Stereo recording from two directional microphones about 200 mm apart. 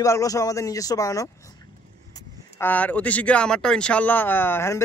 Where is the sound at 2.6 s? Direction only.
10° left (ahead or behind).